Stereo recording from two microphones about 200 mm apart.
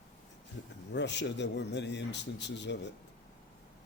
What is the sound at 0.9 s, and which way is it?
A man's voice, 60° left (ahead or behind).